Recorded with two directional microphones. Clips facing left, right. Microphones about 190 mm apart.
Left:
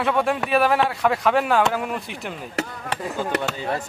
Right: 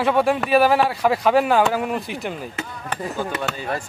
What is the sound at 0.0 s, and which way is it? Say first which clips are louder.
Speech: right 3 dB; centre (ahead or behind).